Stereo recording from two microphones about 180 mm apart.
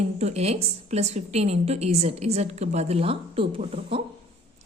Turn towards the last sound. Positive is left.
turn(degrees=-35)  # may be behind; listen again after turning